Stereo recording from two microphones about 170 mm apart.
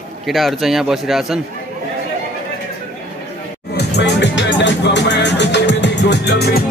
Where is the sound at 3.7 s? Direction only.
90° left.